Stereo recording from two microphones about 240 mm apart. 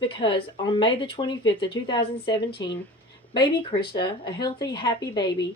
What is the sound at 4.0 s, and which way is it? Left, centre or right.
Speech, centre.